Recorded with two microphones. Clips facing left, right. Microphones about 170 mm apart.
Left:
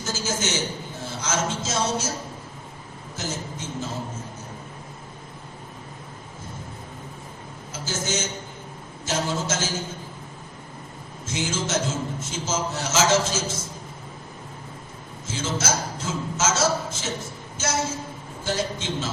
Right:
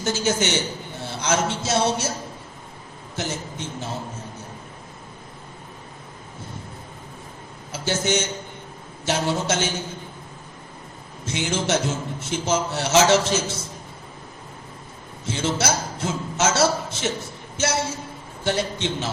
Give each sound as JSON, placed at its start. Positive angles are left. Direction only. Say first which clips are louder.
{"t": 0.0, "sound": "a man's voice", "louder": "right 5 dB", "side_deg": -65}
{"t": 3.2, "sound": "a man's voice", "louder": "right 3 dB", "side_deg": -65}
{"t": 7.7, "sound": "a man's voice", "louder": "right 6 dB", "side_deg": -65}
{"t": 11.3, "sound": "a man's voice", "louder": "right 4 dB", "side_deg": -65}
{"t": 15.3, "sound": "a man's voice", "louder": "right 3 dB", "side_deg": -65}
{"t": 18.4, "sound": "a man's voice", "louder": "right 3 dB", "side_deg": -65}